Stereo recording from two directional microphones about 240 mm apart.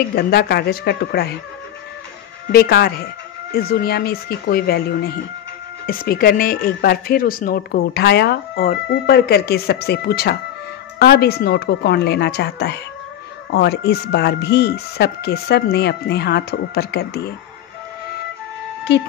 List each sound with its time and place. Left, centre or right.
0.1 s speech: left
2.5 s speech: left